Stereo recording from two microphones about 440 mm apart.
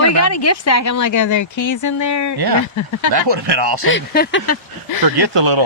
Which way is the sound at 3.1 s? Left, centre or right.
Right.